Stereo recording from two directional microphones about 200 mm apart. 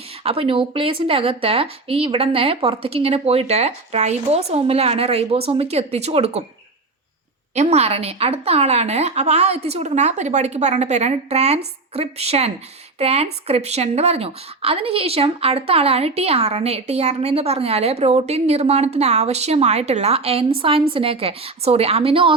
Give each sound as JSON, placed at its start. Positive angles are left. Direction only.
{"t": 0.2, "sound": "speech", "side_deg": -30}
{"t": 7.5, "sound": "speech", "side_deg": -35}